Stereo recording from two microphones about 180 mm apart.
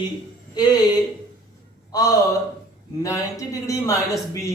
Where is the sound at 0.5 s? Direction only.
20° left (ahead or behind).